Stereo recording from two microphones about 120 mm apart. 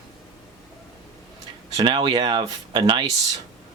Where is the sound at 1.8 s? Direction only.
40° right (ahead or behind).